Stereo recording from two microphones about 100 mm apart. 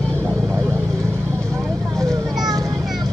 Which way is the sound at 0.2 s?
25° right (ahead or behind).